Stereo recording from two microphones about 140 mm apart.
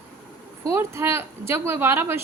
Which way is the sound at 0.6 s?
20° right (ahead or behind).